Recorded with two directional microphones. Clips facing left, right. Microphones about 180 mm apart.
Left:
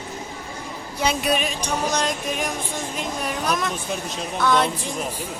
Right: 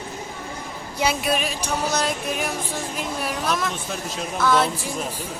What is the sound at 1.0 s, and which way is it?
Music, centre (ahead or behind).